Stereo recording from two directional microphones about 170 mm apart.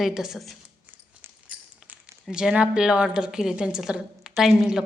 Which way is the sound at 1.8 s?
5° right (ahead or behind).